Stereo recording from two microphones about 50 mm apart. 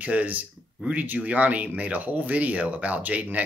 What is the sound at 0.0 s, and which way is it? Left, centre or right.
Speech, right.